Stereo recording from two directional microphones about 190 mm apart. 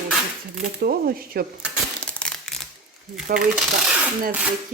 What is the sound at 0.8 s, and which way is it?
Speech, 50° right (ahead or behind).